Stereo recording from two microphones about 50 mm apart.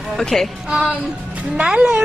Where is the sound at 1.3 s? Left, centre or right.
Right.